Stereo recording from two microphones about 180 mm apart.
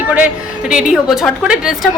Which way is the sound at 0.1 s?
5° right (ahead or behind).